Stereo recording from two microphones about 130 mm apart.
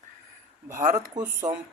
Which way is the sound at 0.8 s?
70° right (ahead or behind).